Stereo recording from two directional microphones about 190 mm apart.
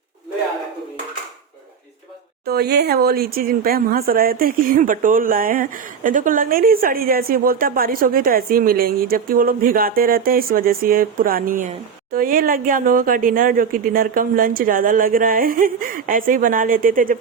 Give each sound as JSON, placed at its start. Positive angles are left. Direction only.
{"t": 2.5, "sound": "speech", "side_deg": -55}